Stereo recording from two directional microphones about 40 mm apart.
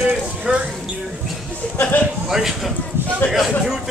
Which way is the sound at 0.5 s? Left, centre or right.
Right.